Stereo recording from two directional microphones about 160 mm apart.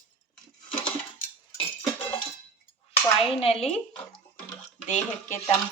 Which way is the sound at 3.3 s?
35° left (ahead or behind).